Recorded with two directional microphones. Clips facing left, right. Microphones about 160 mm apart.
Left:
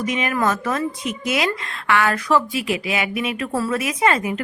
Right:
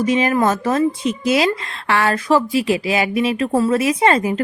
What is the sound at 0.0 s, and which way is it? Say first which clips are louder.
Speech: right 5 dB; 30° right (ahead or behind).